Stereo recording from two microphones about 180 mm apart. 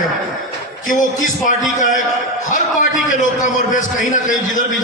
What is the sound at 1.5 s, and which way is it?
A man's voice, 45° left (ahead or behind).